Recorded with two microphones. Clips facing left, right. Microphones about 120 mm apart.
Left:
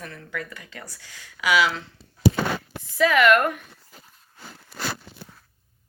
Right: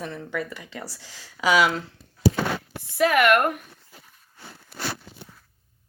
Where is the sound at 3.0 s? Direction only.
55° right (ahead or behind).